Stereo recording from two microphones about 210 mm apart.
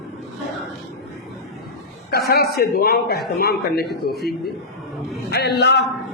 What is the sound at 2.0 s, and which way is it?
A man's voice, 50° left (ahead or behind).